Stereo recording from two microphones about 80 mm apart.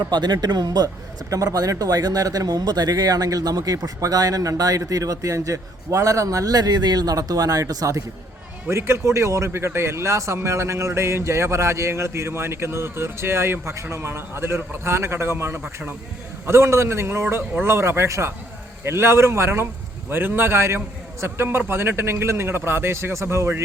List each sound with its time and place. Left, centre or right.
0.0 s speech: right
1.3 s a man's voice: right
8.7 s speech: right
15.6 s a man's voice: right
16.5 s a man's voice: right